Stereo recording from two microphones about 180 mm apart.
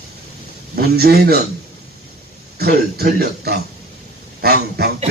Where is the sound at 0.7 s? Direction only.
60° right (ahead or behind).